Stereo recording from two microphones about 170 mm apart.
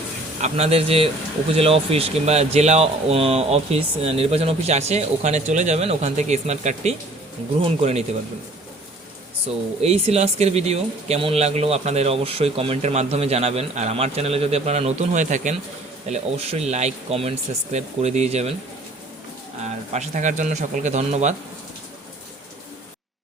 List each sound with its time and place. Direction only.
0.4 s speech: 35° right (ahead or behind)
9.8 s speech: 40° right (ahead or behind)
19.5 s speech: 40° right (ahead or behind)